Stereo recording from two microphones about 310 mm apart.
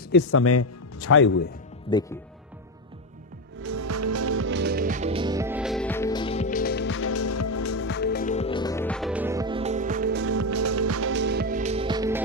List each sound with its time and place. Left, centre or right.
0.1 s speech: left
1.1 s speech: left
1.9 s speech: centre
3.6 s music: right; by 7.8 s left
7.8 s music: left; by 10.2 s right
10.2 s music: right; by 12.2 s centre